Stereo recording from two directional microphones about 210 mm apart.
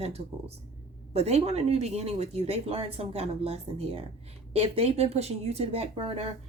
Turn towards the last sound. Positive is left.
turn(degrees=-25)  # may be behind; listen again after turning